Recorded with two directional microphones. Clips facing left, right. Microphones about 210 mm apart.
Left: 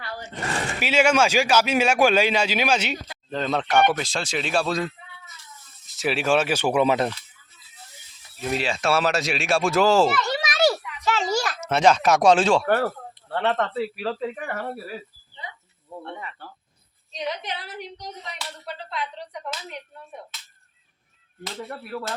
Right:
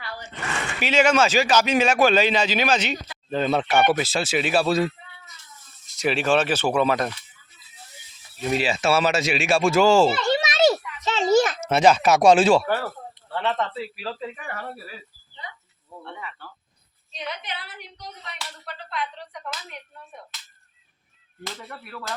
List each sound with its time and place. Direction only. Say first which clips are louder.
0.0 s a sound: left 2 dB; 40° left (ahead or behind)
0.8 s speech: right 1 dB; 10° left (ahead or behind)
3.2 s speech: right 3 dB; 5° right (ahead or behind)
5.9 s speech: right 1 dB; 5° left (ahead or behind); by 7.1 s 25° left (ahead or behind)
8.4 s speech: right 2 dB; centre (ahead or behind)
10.1 s children playing: right 3 dB; 25° right (ahead or behind)
11.6 s speech: right 1 dB; 5° right (ahead or behind)
12.6 s speech: left 4 dB; 55° left (ahead or behind)
17.3 s a woman's voice: left 3 dB; 40° left (ahead or behind)
18.7 s a sound: even; 30° left (ahead or behind)
21.7 s a woman's voice: left 6 dB; 35° left (ahead or behind)